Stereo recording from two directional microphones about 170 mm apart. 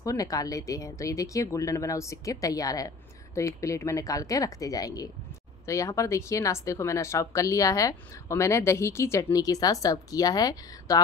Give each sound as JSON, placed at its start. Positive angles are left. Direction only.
{"t": 0.0, "sound": "speech", "side_deg": 20}